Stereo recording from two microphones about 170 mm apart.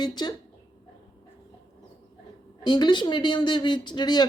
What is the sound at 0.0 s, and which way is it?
Speech, 25° left (ahead or behind).